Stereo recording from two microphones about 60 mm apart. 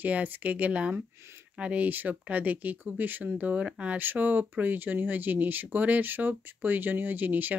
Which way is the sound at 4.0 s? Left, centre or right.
Right.